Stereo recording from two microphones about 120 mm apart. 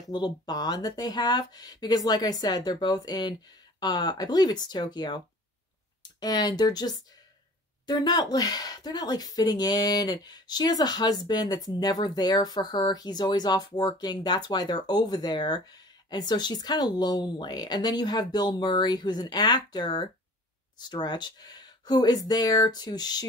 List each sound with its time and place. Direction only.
0.1 s speech: 35° left (ahead or behind)